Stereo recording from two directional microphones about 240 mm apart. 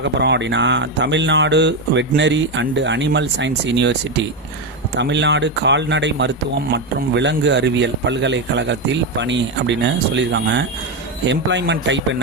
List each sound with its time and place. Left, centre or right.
0.0 s speech: right